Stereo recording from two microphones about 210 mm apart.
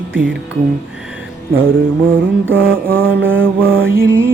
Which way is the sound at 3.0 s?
10° right (ahead or behind).